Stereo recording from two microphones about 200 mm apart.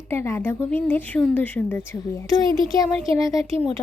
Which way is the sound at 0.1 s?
10° left (ahead or behind).